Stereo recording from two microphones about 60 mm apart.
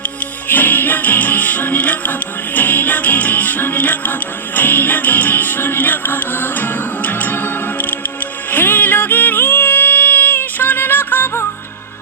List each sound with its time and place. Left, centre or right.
0.4 s music: left